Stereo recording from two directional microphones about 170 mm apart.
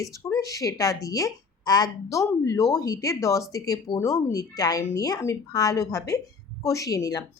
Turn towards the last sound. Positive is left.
turn(degrees=20)  # may be behind; listen again after turning